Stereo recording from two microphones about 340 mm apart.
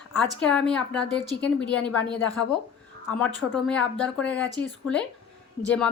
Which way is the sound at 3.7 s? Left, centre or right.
Centre.